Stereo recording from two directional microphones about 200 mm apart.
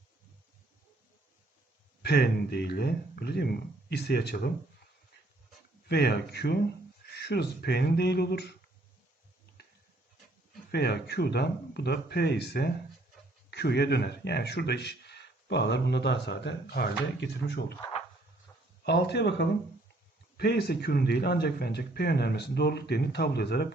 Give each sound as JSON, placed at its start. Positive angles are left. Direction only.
{"t": 2.0, "sound": "speech", "side_deg": 55}
{"t": 5.9, "sound": "speech", "side_deg": 55}
{"t": 10.7, "sound": "speech", "side_deg": 55}
{"t": 18.9, "sound": "speech", "side_deg": 55}